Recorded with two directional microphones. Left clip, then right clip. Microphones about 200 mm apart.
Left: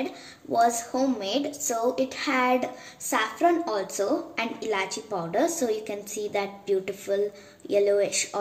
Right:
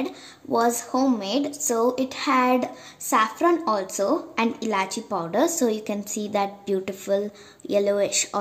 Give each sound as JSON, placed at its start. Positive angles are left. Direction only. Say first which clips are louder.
{"t": 0.0, "sound": "a woman's voice", "louder": "right 2 dB", "side_deg": -60}